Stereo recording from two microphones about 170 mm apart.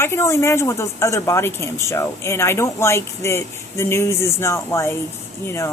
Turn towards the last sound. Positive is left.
turn(degrees=15)  # may be behind; listen again after turning